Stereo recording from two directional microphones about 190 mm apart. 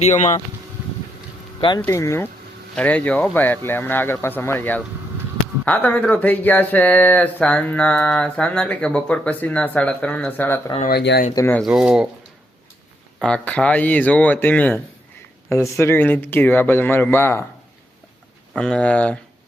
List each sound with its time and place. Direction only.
0.0 s speech: 40° left (ahead or behind)
1.8 s speech: 15° left (ahead or behind)
10.8 s speech: 60° left (ahead or behind)
11.3 s speech: 10° left (ahead or behind)
11.6 s speech: 5° right (ahead or behind)
13.2 s speech: 5° left (ahead or behind)
18.5 s speech: 5° left (ahead or behind)